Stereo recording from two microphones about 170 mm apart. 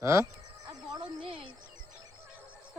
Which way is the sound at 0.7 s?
25° right (ahead or behind).